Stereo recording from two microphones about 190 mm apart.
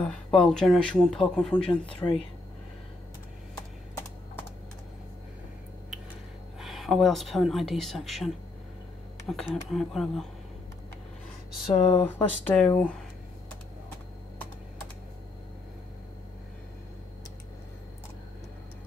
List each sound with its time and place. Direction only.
0.0 s speech: 5° left (ahead or behind)
2.0 s speech: 15° left (ahead or behind)
6.6 s speech: centre (ahead or behind)
9.3 s speech: 5° left (ahead or behind)
11.6 s speech: 35° left (ahead or behind)
12.5 s speech: 10° left (ahead or behind)